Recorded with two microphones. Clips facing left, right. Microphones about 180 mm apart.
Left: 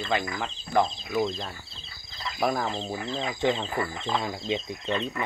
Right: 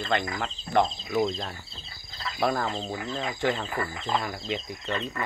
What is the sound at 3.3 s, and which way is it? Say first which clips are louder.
Speech: left 2 dB; 20° left (ahead or behind).